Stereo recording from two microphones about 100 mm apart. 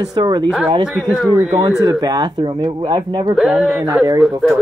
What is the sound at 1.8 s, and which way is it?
Speech, 40° right (ahead or behind).